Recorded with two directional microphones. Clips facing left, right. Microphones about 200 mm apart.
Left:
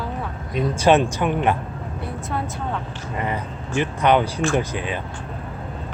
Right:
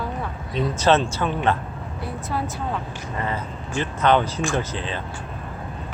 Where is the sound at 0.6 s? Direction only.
10° left (ahead or behind).